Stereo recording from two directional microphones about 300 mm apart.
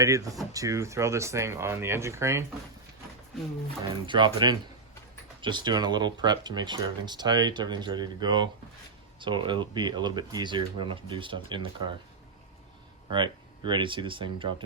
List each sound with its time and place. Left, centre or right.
0.0 s speech: centre
4.0 s speech: centre
13.1 s speech: centre